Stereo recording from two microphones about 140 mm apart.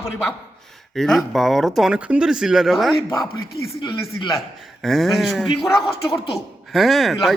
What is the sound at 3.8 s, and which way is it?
Speech, 30° left (ahead or behind).